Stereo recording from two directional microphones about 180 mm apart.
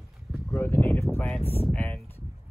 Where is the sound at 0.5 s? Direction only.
10° left (ahead or behind).